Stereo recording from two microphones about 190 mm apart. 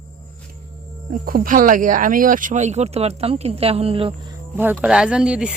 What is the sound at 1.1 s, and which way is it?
Speech, 45° right (ahead or behind).